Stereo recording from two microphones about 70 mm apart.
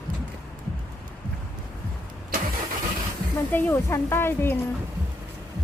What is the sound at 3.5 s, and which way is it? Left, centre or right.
Speech, left.